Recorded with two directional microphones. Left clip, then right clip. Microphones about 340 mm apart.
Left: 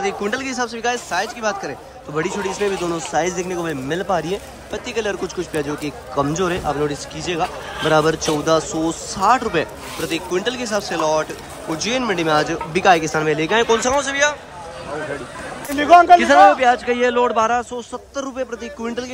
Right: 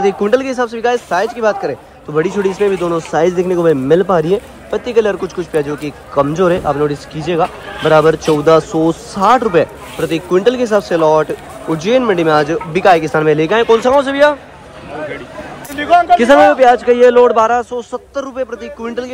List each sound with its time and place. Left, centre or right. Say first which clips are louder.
0.0 s a man's voice: right 9 dB; centre
15.7 s a man's voice: even; left
16.6 s a man's voice: right 8 dB; centre